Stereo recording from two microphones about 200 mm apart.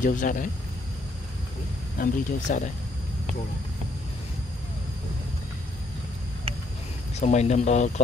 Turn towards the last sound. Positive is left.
turn(degrees=35)  # may be behind; listen again after turning